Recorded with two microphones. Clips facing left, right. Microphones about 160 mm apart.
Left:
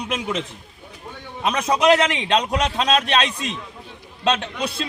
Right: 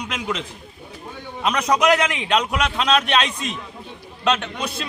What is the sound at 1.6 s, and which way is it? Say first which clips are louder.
A man's voice: left 2 dB; 25° left (ahead or behind).